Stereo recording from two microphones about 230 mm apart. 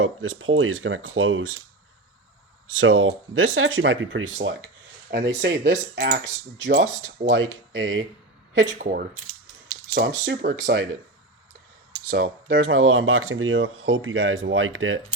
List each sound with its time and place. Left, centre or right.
0.0 s speech: right
2.7 s speech: right
8.6 s speech: right
9.6 s a sound: right
10.2 s speech: right
12.1 s speech: right